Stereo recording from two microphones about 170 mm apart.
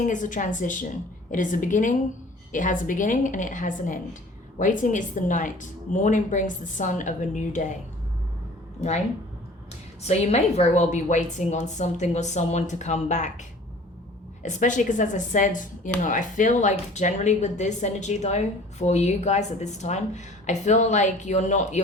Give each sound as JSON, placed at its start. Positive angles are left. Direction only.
{"t": 0.0, "sound": "speech", "side_deg": 50}
{"t": 10.0, "sound": "speech", "side_deg": 40}
{"t": 14.4, "sound": "speech", "side_deg": 45}